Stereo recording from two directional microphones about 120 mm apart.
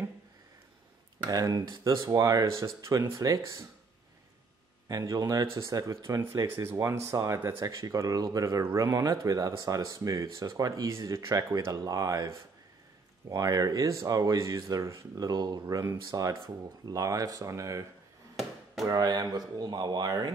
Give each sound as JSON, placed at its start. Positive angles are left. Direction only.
{"t": 1.2, "sound": "speech", "side_deg": -30}
{"t": 4.8, "sound": "speech", "side_deg": -30}
{"t": 18.9, "sound": "speech", "side_deg": -35}